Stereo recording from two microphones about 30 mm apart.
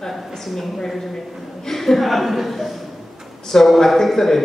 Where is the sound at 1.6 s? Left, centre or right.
Centre.